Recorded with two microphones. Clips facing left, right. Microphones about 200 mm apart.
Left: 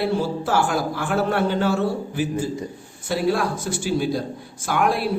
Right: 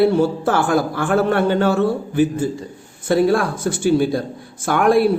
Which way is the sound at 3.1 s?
50° right (ahead or behind).